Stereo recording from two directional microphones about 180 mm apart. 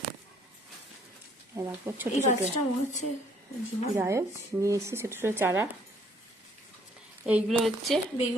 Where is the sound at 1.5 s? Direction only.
10° right (ahead or behind).